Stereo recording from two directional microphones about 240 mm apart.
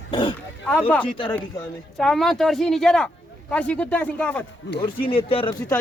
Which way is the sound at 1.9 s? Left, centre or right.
Centre.